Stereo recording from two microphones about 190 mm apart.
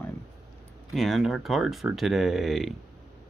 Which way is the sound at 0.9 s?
Centre (ahead or behind).